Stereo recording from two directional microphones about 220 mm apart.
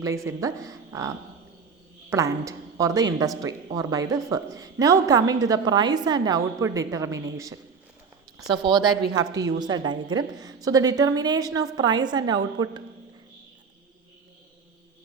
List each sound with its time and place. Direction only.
0.0 s a woman's voice: 15° right (ahead or behind)